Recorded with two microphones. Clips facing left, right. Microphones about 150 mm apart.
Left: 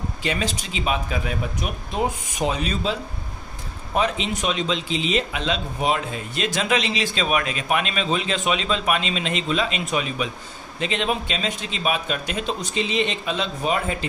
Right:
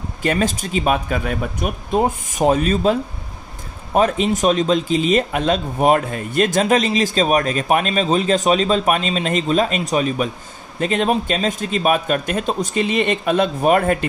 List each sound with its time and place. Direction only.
0.2 s speech: 50° right (ahead or behind)